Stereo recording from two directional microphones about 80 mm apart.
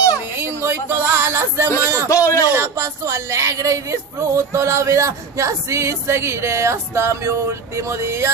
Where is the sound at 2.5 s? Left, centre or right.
Right.